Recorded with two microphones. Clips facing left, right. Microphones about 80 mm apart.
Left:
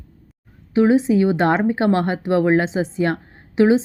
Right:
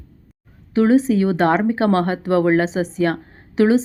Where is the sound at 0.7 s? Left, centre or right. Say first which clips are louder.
Even; left.